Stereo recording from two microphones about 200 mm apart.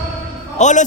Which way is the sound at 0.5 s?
35° left (ahead or behind).